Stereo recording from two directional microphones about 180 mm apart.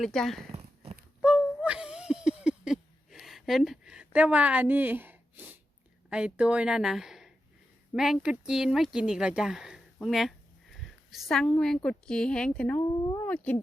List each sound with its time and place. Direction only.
0.0 s speech: centre (ahead or behind)
0.5 s a sound: 35° right (ahead or behind)
1.2 s a sound: 5° right (ahead or behind)
6.1 s speech: 5° right (ahead or behind)
13.0 s speech: 20° left (ahead or behind)
13.2 s speech: 10° left (ahead or behind)